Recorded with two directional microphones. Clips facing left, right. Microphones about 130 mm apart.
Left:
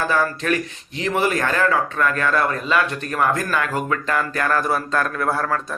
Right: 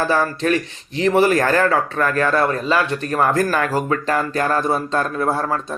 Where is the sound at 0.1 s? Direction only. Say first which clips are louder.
Right 3 dB; 30° right (ahead or behind).